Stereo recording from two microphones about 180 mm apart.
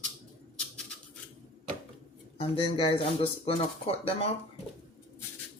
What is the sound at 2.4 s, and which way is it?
Speech, 30° left (ahead or behind).